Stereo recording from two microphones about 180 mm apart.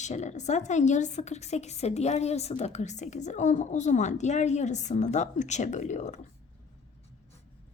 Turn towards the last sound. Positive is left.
turn(degrees=40)  # may be behind; listen again after turning